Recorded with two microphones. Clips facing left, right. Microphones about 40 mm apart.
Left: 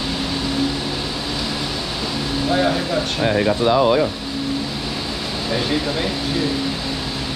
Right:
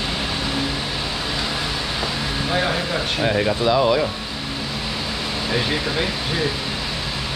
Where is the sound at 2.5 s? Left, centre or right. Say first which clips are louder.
Left 3 dB; centre.